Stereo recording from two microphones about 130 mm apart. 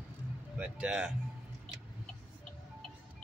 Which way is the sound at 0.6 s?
5° right (ahead or behind).